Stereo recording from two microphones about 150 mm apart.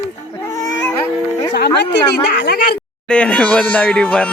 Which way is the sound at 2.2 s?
90° left.